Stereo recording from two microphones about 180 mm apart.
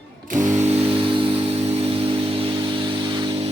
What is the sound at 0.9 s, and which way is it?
Music, 30° right (ahead or behind).